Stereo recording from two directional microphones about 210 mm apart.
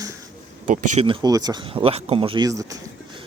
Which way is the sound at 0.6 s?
35° right (ahead or behind).